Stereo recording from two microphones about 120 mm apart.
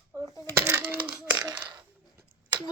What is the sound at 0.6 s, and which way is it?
Speech, 25° right (ahead or behind).